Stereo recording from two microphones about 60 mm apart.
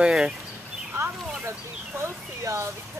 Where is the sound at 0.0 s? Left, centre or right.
Centre.